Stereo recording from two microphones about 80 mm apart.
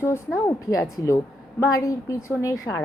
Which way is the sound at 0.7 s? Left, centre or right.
Left.